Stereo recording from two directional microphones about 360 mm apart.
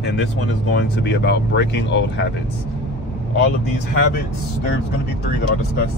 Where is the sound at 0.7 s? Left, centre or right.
Left.